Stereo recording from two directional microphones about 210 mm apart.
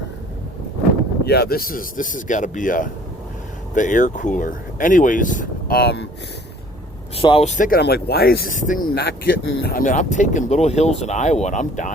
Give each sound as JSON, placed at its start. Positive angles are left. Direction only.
{"t": 1.2, "sound": "speech", "side_deg": 50}
{"t": 7.2, "sound": "speech", "side_deg": 25}
{"t": 9.4, "sound": "speech", "side_deg": 65}
{"t": 9.7, "sound": "speech", "side_deg": 40}